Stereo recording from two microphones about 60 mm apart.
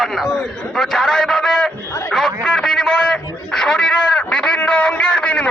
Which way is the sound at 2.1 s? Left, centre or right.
Centre.